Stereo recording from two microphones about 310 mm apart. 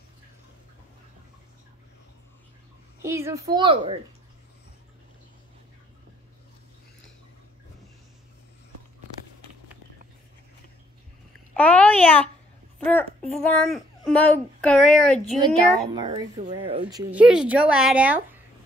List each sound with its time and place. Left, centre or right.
3.0 s a child's voice: centre
11.5 s a sound: centre
12.8 s a child's voice: centre
15.4 s a woman's voice: centre
16.8 s a child's voice: centre